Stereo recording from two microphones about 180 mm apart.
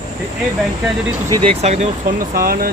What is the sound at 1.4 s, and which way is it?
Speech, 35° right (ahead or behind).